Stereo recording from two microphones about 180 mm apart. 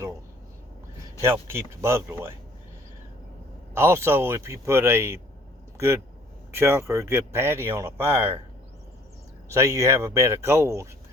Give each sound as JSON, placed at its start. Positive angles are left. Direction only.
{"t": 1.2, "sound": "speech", "side_deg": -15}
{"t": 3.8, "sound": "speech", "side_deg": -15}
{"t": 9.5, "sound": "speech", "side_deg": -15}